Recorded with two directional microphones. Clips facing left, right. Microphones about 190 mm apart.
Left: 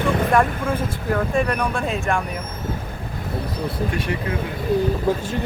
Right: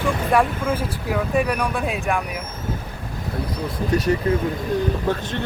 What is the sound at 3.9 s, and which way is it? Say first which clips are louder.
Speech: right 6 dB; 40° right (ahead or behind).